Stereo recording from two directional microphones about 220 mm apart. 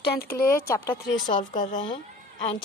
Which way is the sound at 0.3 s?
10° left (ahead or behind).